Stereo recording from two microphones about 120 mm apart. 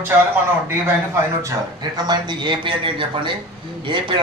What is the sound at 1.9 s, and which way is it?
Speech, 35° right (ahead or behind).